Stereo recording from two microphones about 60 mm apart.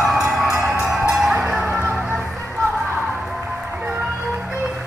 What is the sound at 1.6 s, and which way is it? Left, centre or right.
Music, right.